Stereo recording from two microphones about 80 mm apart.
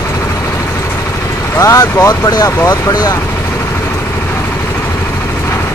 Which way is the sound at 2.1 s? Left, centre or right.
Left.